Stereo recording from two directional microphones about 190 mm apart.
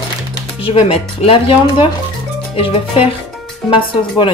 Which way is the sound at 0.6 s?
30° left (ahead or behind).